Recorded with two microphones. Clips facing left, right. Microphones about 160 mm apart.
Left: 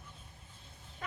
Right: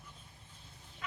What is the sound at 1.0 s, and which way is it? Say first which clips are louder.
Chicken: left 2 dB; 45° left (ahead or behind).